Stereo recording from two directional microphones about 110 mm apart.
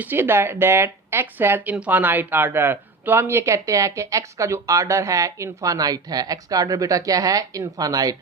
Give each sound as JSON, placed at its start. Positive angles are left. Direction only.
{"t": 0.0, "sound": "speech", "side_deg": -20}